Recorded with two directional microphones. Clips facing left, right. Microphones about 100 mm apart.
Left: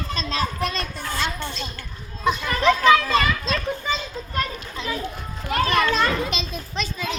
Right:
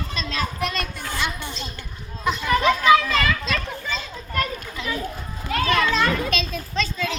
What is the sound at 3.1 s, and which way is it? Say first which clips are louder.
Speech: left 2 dB; 30° left (ahead or behind).